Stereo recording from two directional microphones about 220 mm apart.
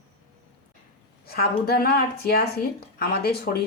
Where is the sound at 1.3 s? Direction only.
45° left (ahead or behind).